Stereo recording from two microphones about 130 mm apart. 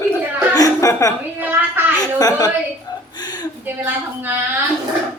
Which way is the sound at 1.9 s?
30° left (ahead or behind).